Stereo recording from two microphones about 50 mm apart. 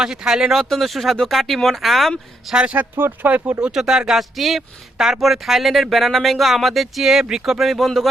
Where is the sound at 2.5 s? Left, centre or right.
Right.